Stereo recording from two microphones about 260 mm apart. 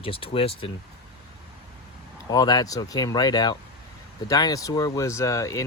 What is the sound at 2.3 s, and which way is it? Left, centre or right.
Speech, centre.